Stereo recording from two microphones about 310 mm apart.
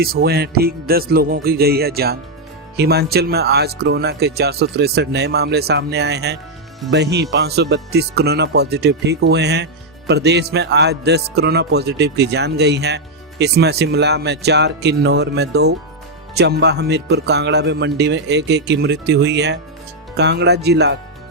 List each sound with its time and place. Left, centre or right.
0.0 s music: right
2.7 s speech: right